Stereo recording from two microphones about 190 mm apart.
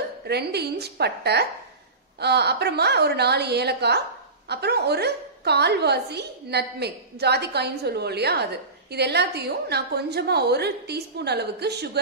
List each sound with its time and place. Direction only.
0.3 s a woman's voice: 60° right (ahead or behind)